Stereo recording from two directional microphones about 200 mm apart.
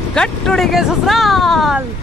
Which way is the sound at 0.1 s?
5° left (ahead or behind).